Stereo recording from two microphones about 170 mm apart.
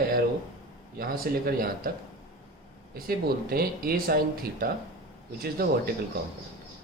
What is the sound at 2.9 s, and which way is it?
Speech, 60° right (ahead or behind).